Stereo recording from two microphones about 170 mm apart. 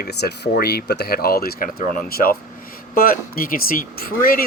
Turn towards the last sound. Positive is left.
turn(degrees=55)  # may be behind; listen again after turning